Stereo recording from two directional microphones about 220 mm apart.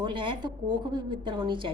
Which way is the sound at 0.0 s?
20° right (ahead or behind).